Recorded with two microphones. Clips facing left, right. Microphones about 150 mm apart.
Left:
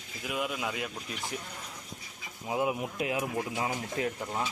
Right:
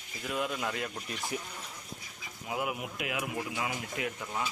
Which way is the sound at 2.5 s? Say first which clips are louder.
Left 4 dB; 25° left (ahead or behind).